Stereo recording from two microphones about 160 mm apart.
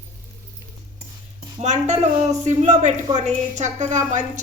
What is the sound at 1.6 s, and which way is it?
A woman's voice, 45° right (ahead or behind).